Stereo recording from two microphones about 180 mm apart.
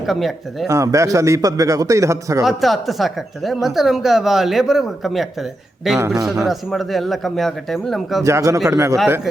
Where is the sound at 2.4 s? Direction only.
Centre (ahead or behind).